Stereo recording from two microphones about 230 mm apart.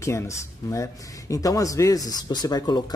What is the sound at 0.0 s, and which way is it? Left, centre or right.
A man's voice, centre.